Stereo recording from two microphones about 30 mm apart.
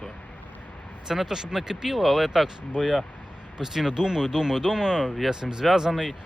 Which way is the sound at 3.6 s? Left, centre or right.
Centre.